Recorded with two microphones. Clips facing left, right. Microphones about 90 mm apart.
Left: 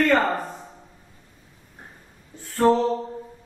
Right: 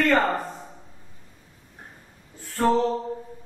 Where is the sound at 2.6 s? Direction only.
25° left (ahead or behind).